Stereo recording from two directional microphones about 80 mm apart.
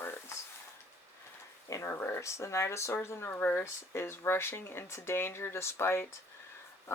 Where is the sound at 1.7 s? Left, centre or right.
Left.